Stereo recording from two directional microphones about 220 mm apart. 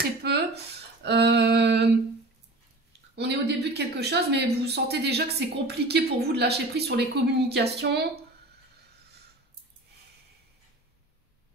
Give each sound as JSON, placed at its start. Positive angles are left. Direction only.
{"t": 0.0, "sound": "a sound", "side_deg": -45}
{"t": 1.0, "sound": "speech", "side_deg": -50}
{"t": 3.2, "sound": "speech", "side_deg": -50}